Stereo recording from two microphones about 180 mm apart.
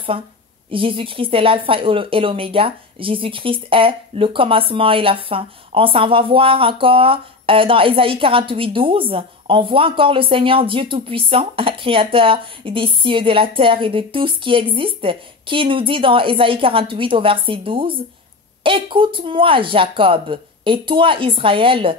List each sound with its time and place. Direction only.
0.7 s speech: 30° right (ahead or behind)